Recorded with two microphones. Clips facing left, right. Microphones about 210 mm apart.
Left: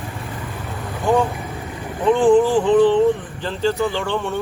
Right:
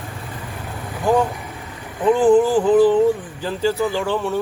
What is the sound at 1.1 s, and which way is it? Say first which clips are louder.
Speech: even; 5° right (ahead or behind).